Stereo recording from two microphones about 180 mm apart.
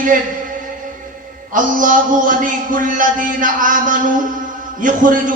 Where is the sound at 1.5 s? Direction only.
45° right (ahead or behind).